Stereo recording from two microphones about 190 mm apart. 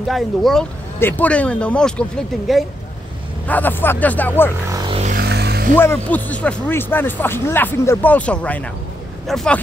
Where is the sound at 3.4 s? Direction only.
10° left (ahead or behind).